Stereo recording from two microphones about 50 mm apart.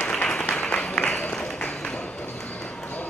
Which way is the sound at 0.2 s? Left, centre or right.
Centre.